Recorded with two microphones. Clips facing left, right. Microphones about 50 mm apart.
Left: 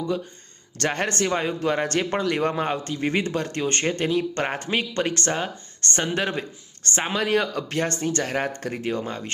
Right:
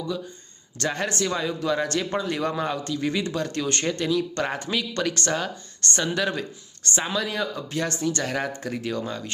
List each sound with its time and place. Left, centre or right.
0.8 s a man's voice: left
7.8 s speech: left